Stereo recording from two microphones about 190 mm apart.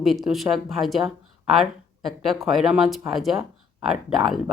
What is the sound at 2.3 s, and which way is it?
Speech, centre (ahead or behind).